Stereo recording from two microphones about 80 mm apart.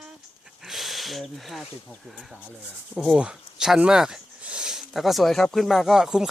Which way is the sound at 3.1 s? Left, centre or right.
Centre.